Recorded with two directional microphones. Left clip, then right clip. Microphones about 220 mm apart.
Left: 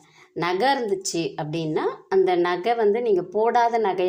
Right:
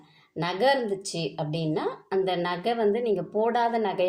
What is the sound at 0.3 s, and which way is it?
Speech, 25° left (ahead or behind).